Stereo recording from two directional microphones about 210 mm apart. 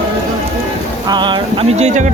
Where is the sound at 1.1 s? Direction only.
20° right (ahead or behind).